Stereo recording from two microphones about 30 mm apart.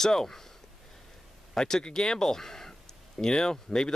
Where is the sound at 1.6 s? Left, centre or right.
Left.